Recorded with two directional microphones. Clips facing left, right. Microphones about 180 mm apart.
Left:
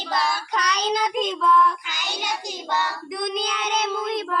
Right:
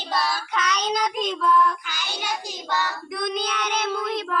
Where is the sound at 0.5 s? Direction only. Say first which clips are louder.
Left 1 dB; 35° left (ahead or behind).